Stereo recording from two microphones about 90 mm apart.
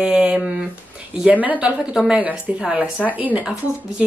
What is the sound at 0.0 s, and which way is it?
Speech, 10° right (ahead or behind).